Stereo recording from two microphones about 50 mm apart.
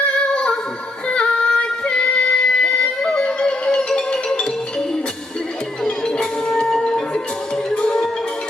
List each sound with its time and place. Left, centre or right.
0.3 s singing: centre
1.0 s female singing: left
5.8 s music: centre